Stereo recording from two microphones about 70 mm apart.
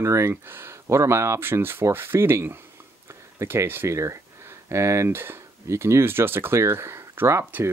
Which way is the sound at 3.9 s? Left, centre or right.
Right.